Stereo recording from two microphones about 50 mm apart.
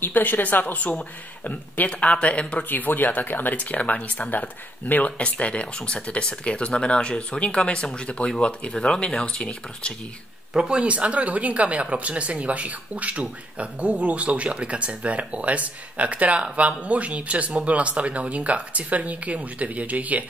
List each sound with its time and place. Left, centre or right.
0.0 s speech: left
2.7 s speech: left
10.5 s speech: centre
10.8 s speech: right